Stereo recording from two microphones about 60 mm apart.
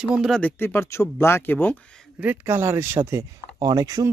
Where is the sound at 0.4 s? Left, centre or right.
Left.